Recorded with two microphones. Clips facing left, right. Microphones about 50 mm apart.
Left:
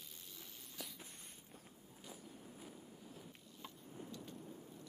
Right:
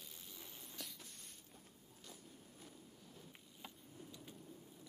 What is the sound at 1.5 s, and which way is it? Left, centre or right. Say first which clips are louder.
Walk: left 3 dB; centre.